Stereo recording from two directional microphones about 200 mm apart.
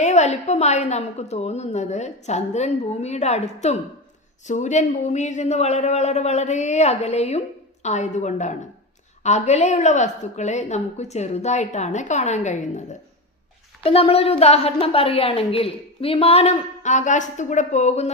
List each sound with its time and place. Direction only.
0.0 s a man's voice: 35° left (ahead or behind)
13.8 s a woman's voice: 30° left (ahead or behind)